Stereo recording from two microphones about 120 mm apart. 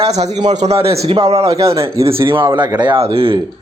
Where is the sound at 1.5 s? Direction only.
25° right (ahead or behind).